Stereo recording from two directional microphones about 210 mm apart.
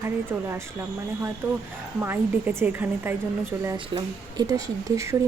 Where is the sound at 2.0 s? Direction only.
10° right (ahead or behind).